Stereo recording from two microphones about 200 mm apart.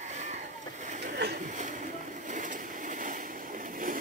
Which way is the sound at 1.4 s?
40° right (ahead or behind).